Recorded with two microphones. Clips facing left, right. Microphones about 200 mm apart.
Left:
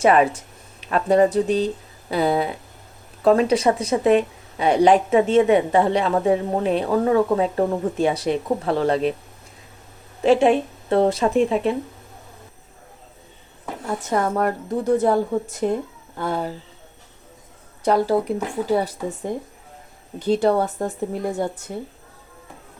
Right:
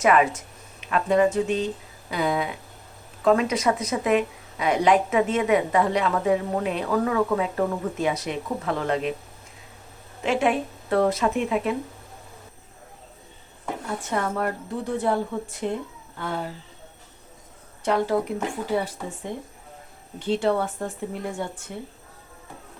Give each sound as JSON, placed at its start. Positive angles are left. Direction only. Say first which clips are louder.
{"t": 0.0, "sound": "a woman's voice", "louder": "left 3 dB", "side_deg": 30}
{"t": 10.2, "sound": "a woman's voice", "louder": "left 7 dB", "side_deg": 30}
{"t": 14.1, "sound": "a woman's voice", "louder": "left 5 dB", "side_deg": 40}
{"t": 17.8, "sound": "a woman's voice", "louder": "left 4 dB", "side_deg": 35}